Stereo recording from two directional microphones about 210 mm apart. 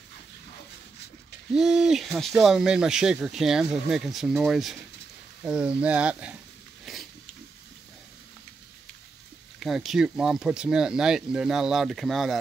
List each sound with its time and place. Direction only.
1.5 s speech: 5° right (ahead or behind)
6.9 s pig: centre (ahead or behind)
9.6 s speech: centre (ahead or behind)